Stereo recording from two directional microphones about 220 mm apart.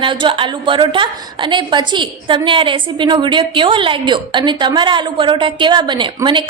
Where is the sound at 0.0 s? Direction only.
20° right (ahead or behind).